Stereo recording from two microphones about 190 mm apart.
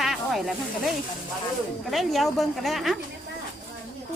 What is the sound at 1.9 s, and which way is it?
Speech, centre (ahead or behind).